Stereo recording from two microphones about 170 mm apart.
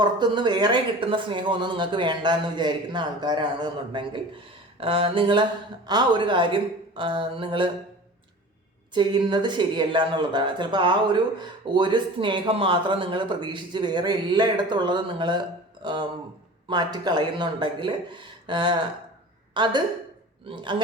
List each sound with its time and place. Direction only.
0.0 s speech: 25° right (ahead or behind)
8.9 s speech: 25° right (ahead or behind)